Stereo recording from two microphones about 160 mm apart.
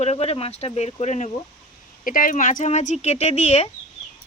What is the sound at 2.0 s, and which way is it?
Speech, 60° left (ahead or behind).